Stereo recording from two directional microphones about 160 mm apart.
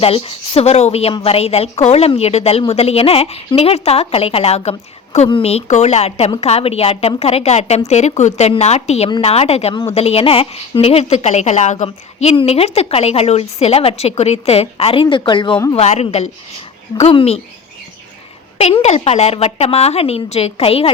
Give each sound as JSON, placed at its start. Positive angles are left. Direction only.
{"t": 0.0, "sound": "a woman's voice", "side_deg": 35}
{"t": 15.7, "sound": "a woman's voice", "side_deg": 40}
{"t": 18.5, "sound": "a woman's voice", "side_deg": 40}